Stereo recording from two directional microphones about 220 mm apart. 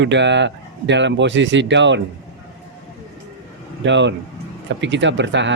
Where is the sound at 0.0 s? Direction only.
55° right (ahead or behind).